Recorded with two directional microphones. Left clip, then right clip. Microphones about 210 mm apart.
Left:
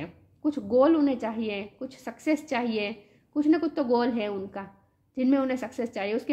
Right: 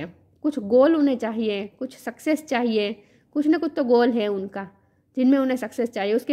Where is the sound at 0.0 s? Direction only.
45° right (ahead or behind).